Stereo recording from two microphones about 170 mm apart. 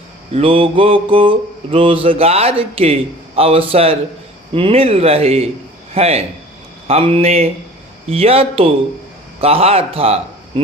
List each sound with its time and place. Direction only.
0.3 s mantra: 30° right (ahead or behind)
9.4 s a man's voice: 35° right (ahead or behind)